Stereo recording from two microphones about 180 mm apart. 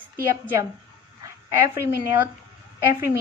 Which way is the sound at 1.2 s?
15° right (ahead or behind).